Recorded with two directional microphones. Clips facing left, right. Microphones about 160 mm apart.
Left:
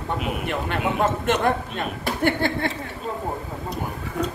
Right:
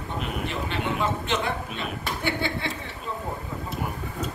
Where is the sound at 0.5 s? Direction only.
50° left (ahead or behind).